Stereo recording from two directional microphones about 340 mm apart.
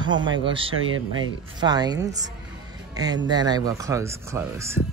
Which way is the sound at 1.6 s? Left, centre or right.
Centre.